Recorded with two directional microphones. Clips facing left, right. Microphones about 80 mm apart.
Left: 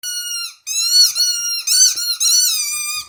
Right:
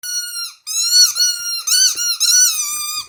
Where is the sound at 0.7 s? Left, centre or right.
Right.